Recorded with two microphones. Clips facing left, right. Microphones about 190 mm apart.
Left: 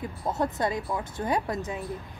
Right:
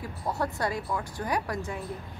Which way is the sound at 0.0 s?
20° left (ahead or behind).